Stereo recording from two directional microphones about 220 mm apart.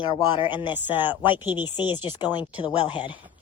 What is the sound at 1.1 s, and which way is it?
Speech, 20° left (ahead or behind).